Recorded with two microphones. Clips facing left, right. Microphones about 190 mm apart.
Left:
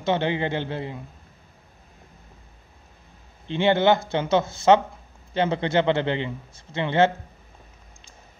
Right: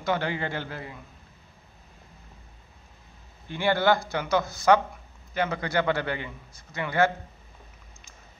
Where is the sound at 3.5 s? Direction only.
25° left (ahead or behind).